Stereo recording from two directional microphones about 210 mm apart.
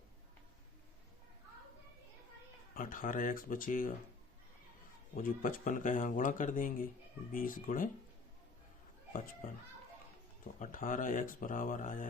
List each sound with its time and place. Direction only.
2.7 s speech: 40° left (ahead or behind)
5.1 s speech: 40° left (ahead or behind)
10.6 s speech: 40° left (ahead or behind)